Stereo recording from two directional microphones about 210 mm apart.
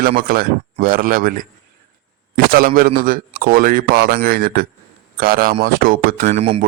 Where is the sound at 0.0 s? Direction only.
45° right (ahead or behind).